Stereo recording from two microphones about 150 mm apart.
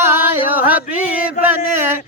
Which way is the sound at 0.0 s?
15° right (ahead or behind).